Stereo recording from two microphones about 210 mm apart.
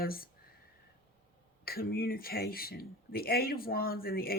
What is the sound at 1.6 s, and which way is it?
Speech, 45° left (ahead or behind).